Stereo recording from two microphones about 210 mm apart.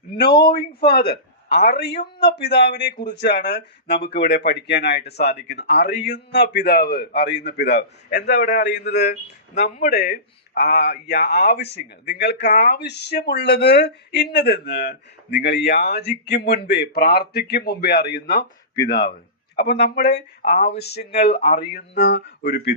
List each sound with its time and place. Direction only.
0.3 s speech: 50° left (ahead or behind)
10.5 s speech: 50° left (ahead or behind)
19.5 s speech: 55° left (ahead or behind)